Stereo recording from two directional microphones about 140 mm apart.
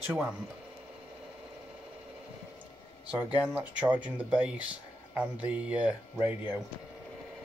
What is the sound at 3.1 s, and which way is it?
Speech, 10° right (ahead or behind).